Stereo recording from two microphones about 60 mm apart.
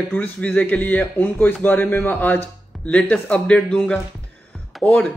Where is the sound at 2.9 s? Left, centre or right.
Left.